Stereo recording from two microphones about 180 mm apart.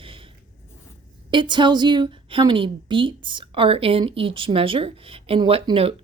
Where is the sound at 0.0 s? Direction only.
30° right (ahead or behind).